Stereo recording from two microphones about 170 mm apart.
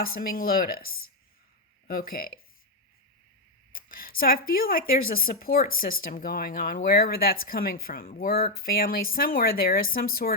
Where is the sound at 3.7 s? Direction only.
55° left (ahead or behind).